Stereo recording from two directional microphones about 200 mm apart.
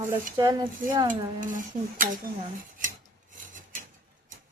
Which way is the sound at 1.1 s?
40° right (ahead or behind).